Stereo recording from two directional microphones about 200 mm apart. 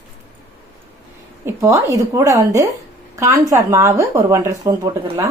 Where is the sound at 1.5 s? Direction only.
15° right (ahead or behind).